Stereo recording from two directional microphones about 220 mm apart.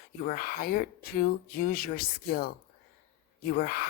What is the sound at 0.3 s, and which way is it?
A woman's voice, 40° left (ahead or behind).